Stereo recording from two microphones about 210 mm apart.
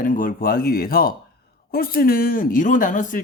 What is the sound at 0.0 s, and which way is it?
Speech, 40° left (ahead or behind).